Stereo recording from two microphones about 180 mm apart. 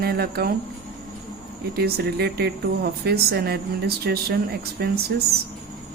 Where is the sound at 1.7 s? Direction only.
60° right (ahead or behind).